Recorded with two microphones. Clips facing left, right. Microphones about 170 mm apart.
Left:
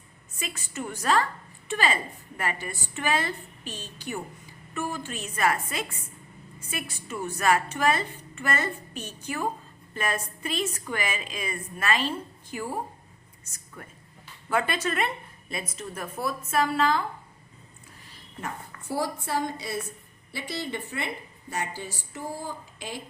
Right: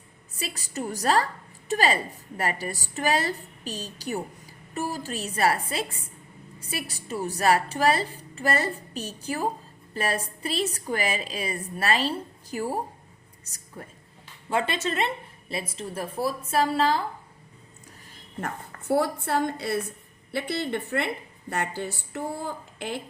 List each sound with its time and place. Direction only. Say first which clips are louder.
0.3 s a woman's voice: right 2 dB; 35° right (ahead or behind)
13.4 s a sound: right 3 dB; 35° right (ahead or behind)
14.5 s a woman's voice: even; 25° right (ahead or behind)
18.3 s a woman's voice: right 3 dB; 60° right (ahead or behind)